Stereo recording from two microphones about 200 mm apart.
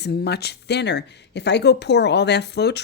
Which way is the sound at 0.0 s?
55° left (ahead or behind).